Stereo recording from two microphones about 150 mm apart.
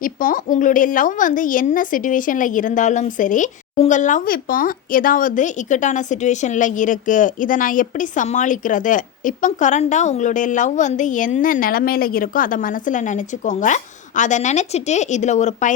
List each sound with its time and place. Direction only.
0.0 s a woman's voice: 65° left (ahead or behind)